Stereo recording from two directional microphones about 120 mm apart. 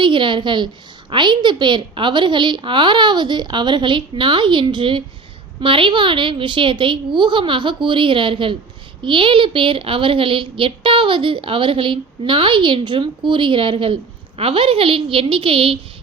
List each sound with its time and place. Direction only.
0.0 s a woman's voice: 45° right (ahead or behind)